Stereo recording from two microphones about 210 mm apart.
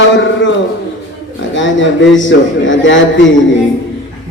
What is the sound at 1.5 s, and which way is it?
A man's voice, 60° left (ahead or behind).